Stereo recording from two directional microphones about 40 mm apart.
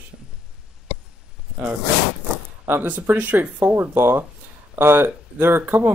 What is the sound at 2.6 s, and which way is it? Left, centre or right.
Speech, right.